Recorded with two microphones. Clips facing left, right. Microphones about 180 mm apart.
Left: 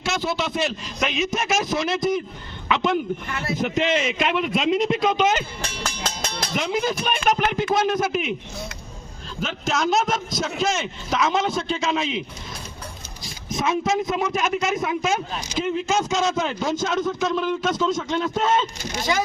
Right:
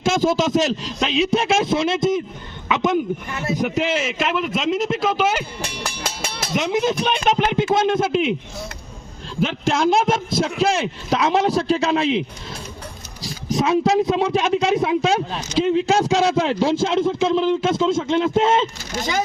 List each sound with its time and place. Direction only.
0.0 s a man's voice: 45° right (ahead or behind)
1.1 s a man's voice: 30° right (ahead or behind); by 6.5 s 10° right (ahead or behind)
6.5 s a man's voice: 20° right (ahead or behind)
8.1 s speech: 5° left (ahead or behind)
9.6 s a man's voice: 30° right (ahead or behind)
13.2 s a man's voice: 35° right (ahead or behind)